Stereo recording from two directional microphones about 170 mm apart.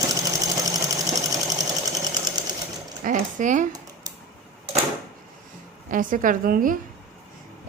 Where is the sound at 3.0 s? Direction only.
50° right (ahead or behind).